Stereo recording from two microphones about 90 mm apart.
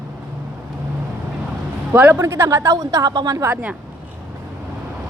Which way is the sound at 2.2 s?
30° right (ahead or behind).